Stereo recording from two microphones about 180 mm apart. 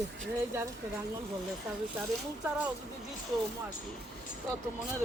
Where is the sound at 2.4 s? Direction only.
5° right (ahead or behind).